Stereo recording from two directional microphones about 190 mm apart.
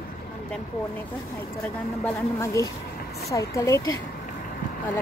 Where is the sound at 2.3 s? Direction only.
15° left (ahead or behind).